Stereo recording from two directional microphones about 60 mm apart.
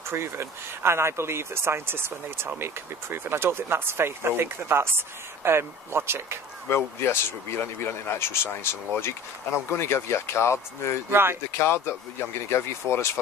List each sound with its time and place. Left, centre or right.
0.1 s speech: right
6.7 s speech: left
9.7 s speech: left
11.1 s speech: right
11.5 s speech: left